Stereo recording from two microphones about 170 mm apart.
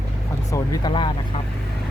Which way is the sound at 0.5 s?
25° left (ahead or behind).